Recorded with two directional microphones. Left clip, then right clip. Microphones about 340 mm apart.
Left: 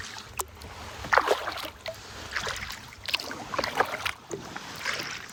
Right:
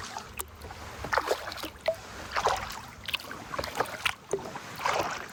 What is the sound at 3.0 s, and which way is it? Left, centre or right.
Rowboat, left.